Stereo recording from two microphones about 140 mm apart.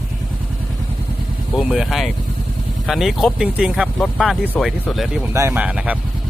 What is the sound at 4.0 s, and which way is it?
Speech, 5° left (ahead or behind).